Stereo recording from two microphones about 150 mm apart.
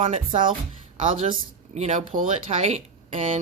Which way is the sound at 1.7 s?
45° right (ahead or behind).